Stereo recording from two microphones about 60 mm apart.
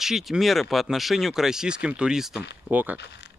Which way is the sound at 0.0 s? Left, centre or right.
Centre.